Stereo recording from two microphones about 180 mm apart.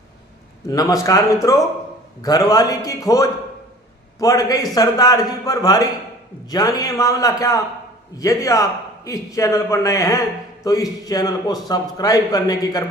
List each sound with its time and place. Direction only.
0.7 s a man's voice: 20° left (ahead or behind)